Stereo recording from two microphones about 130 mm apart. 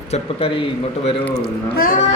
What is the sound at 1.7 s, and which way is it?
Speech, 90° left.